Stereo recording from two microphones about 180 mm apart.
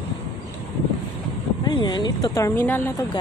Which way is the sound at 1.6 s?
25° left (ahead or behind).